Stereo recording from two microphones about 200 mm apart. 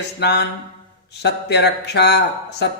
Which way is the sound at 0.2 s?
55° left (ahead or behind).